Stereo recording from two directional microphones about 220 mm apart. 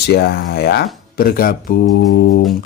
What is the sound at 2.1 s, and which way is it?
Speech, 55° left (ahead or behind).